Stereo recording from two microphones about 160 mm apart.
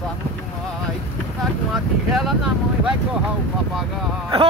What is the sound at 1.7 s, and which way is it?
Speech, centre (ahead or behind).